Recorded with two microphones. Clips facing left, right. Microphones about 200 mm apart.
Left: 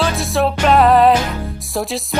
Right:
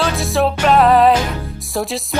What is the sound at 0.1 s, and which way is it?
Music, centre (ahead or behind).